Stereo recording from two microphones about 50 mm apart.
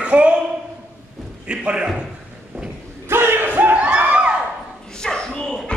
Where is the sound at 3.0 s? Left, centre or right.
Right.